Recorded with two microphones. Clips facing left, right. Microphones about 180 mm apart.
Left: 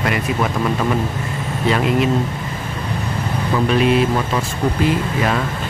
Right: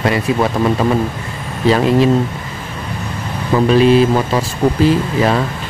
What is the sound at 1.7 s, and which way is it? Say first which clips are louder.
Speech: right 5 dB; 30° right (ahead or behind).